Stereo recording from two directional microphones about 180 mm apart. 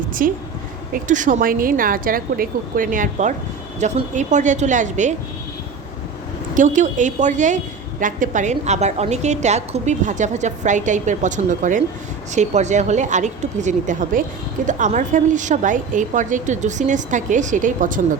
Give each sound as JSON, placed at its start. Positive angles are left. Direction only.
{"t": 0.2, "sound": "a woman's voice", "side_deg": -50}
{"t": 6.5, "sound": "a woman's voice", "side_deg": -45}